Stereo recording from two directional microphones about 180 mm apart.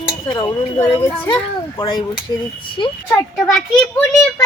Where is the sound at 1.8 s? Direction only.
25° left (ahead or behind).